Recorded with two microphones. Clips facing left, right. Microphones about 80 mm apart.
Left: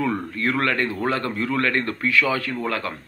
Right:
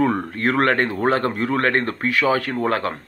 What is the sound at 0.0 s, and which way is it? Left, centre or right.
A man's voice, right.